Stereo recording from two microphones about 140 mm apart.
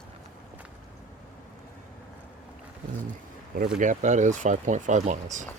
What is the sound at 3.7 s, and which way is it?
Speech, 60° right (ahead or behind).